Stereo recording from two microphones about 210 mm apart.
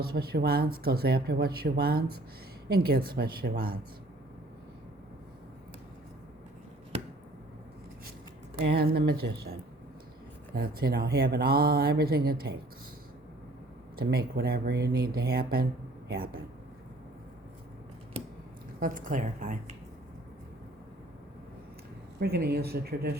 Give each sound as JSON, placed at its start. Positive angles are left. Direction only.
{"t": 0.0, "sound": "speech", "side_deg": -45}
{"t": 8.6, "sound": "speech", "side_deg": -50}
{"t": 13.9, "sound": "speech", "side_deg": -50}
{"t": 18.8, "sound": "a woman's voice", "side_deg": -40}
{"t": 22.2, "sound": "speech", "side_deg": -50}